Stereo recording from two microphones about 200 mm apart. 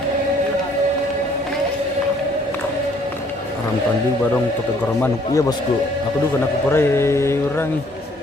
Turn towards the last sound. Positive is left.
turn(degrees=15)  # may be behind; listen again after turning